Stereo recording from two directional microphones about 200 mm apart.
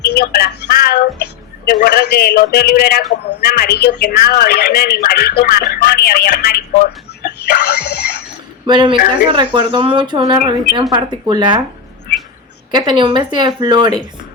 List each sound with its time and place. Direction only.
0.0 s a sound: 55° left (ahead or behind)
1.6 s a woman's voice: 50° left (ahead or behind)
8.6 s speech: 25° right (ahead or behind)
12.7 s speech: 25° right (ahead or behind)